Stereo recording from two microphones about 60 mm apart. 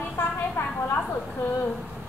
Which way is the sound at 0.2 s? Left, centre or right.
Left.